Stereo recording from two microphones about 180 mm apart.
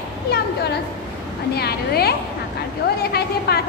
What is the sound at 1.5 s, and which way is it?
A woman's voice, 60° left (ahead or behind).